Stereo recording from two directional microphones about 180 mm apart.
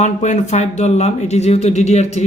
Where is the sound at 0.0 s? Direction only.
40° left (ahead or behind).